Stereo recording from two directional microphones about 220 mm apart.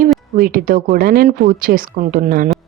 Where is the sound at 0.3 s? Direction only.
40° right (ahead or behind).